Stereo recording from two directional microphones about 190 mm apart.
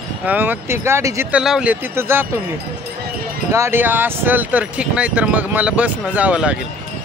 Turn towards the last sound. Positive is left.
turn(degrees=-5)  # may be behind; listen again after turning